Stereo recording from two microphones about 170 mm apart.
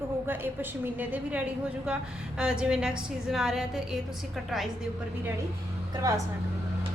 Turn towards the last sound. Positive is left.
turn(degrees=-20)  # may be behind; listen again after turning